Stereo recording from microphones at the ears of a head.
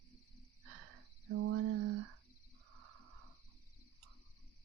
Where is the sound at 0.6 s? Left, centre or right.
Right.